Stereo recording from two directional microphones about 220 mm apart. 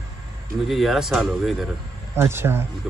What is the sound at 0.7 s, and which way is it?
Speech, centre (ahead or behind).